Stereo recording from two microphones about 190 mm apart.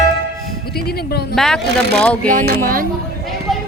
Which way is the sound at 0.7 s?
55° left (ahead or behind).